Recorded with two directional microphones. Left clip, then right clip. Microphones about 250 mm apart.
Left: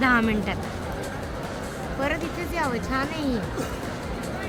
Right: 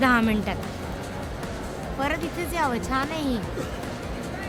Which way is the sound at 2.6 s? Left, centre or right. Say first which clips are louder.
Right 1 dB; right.